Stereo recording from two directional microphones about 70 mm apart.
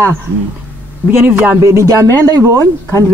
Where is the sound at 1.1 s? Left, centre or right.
Right.